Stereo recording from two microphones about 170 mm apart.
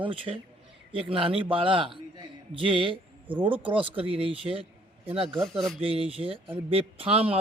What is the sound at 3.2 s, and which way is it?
Speech, 10° right (ahead or behind).